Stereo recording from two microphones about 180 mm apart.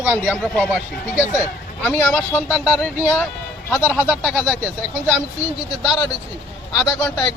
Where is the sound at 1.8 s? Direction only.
10° left (ahead or behind).